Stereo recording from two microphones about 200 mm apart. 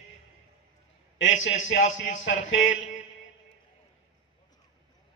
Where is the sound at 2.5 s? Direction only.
75° left (ahead or behind).